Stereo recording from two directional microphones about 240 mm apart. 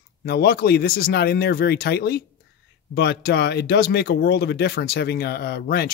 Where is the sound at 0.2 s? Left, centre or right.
Left.